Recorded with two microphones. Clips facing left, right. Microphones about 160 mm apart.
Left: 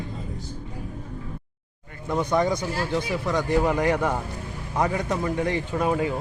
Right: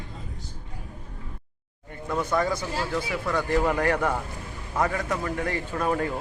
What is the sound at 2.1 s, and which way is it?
A man's voice, 20° left (ahead or behind).